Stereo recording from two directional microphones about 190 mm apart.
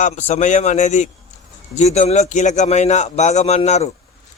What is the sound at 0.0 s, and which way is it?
A man's voice, 35° left (ahead or behind).